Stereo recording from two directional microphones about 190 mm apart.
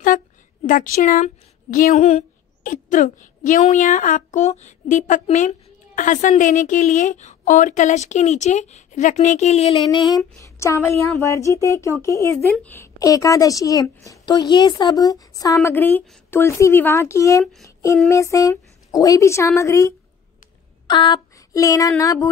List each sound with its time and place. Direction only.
0.7 s a woman's voice: 45° left (ahead or behind); by 19.9 s 15° left (ahead or behind)
20.8 s female singing: 25° left (ahead or behind)